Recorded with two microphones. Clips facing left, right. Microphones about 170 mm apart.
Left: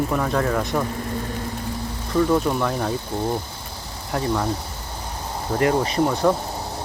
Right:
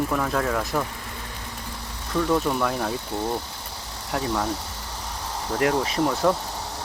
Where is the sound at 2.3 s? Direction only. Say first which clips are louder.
Left 2 dB; centre (ahead or behind).